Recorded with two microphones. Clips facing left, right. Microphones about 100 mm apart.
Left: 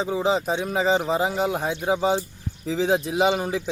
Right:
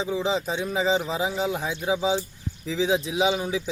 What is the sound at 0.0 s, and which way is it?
A man's voice, 50° left (ahead or behind).